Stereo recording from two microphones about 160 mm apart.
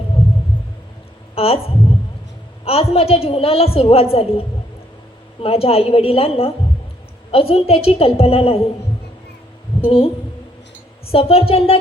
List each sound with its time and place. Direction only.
1.4 s a woman's voice: 40° left (ahead or behind)
9.8 s a woman's voice: 35° left (ahead or behind)
11.1 s a woman's voice: 40° left (ahead or behind)